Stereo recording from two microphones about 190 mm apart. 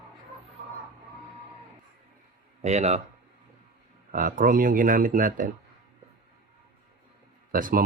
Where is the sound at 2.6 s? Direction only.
35° right (ahead or behind).